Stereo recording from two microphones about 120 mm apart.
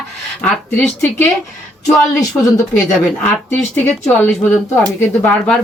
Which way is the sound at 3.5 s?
20° left (ahead or behind).